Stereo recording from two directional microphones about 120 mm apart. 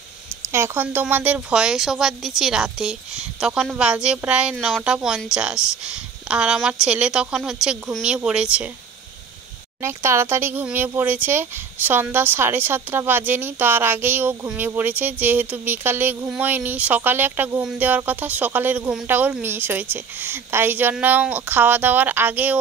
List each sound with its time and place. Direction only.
0.5 s a woman's voice: 20° right (ahead or behind)
9.8 s speech: 20° right (ahead or behind)